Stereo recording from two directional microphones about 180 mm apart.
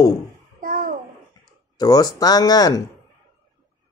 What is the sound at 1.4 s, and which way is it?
Speech, 20° left (ahead or behind).